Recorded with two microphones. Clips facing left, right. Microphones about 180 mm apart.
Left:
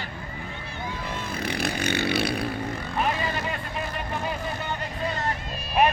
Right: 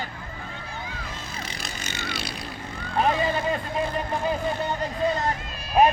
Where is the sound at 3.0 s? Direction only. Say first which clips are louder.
Right 5 dB; 30° right (ahead or behind).